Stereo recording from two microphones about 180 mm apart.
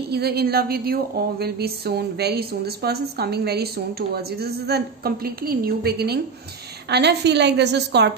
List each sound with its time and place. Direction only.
0.1 s a woman's voice: 60° right (ahead or behind)